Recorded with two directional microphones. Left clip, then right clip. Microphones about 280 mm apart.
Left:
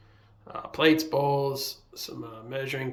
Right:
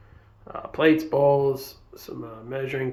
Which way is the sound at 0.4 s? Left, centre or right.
Centre.